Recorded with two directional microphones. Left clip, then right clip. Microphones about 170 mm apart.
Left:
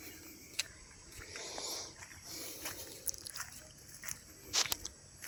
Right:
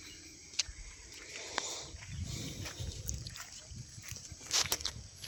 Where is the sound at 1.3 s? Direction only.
Centre (ahead or behind); by 3.5 s 15° left (ahead or behind).